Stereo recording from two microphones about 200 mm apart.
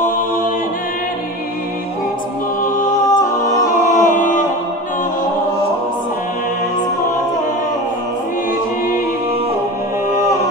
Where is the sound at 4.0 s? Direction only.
40° left (ahead or behind).